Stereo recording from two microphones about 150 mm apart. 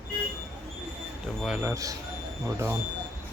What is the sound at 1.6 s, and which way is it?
Speech, 20° right (ahead or behind).